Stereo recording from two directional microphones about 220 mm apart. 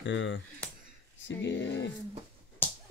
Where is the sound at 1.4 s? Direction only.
55° left (ahead or behind).